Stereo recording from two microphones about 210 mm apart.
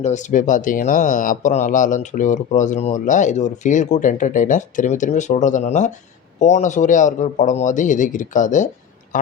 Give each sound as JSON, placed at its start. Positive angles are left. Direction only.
{"t": 0.0, "sound": "speech", "side_deg": 35}